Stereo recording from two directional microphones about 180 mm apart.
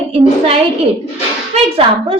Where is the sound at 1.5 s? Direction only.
30° right (ahead or behind).